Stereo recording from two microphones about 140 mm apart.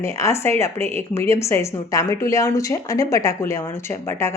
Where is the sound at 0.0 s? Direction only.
20° left (ahead or behind).